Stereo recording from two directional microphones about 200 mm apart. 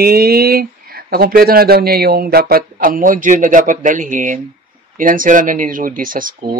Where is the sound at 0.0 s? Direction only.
50° right (ahead or behind).